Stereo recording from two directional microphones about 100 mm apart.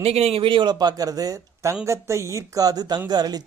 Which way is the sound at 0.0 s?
90° right.